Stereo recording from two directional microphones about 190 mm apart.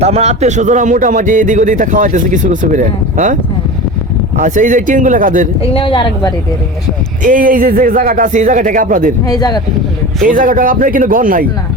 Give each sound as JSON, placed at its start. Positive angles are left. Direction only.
{"t": 0.0, "sound": "speech", "side_deg": -35}
{"t": 4.4, "sound": "speech", "side_deg": -40}
{"t": 5.7, "sound": "a woman's voice", "side_deg": 25}
{"t": 7.2, "sound": "speech", "side_deg": -45}
{"t": 9.2, "sound": "a woman's voice", "side_deg": 20}
{"t": 10.2, "sound": "speech", "side_deg": -45}